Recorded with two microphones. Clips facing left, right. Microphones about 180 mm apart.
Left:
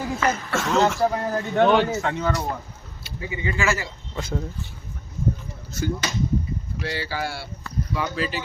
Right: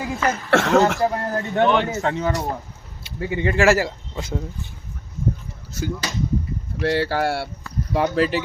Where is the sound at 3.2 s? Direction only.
60° right (ahead or behind).